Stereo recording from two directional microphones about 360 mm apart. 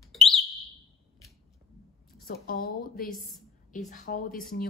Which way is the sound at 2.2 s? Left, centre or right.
Left.